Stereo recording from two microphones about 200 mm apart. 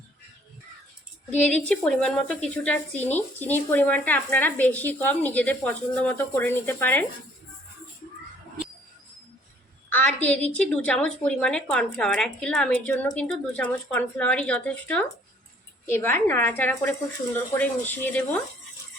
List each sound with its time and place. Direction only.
1.5 s speech: 5° left (ahead or behind)
9.9 s a woman's voice: 10° left (ahead or behind)